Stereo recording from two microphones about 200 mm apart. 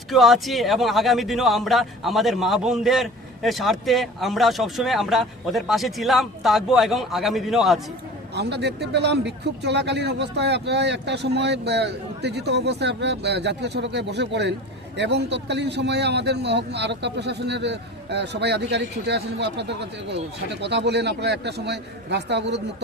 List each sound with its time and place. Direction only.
0.1 s speech: centre (ahead or behind)
8.4 s a man's voice: 55° right (ahead or behind)